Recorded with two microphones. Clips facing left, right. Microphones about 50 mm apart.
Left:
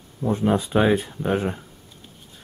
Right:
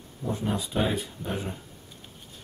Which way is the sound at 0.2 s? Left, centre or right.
Left.